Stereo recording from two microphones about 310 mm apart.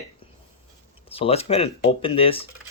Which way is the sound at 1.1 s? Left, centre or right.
Centre.